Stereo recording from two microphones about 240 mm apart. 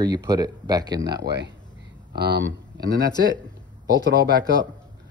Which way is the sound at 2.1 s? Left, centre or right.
Right.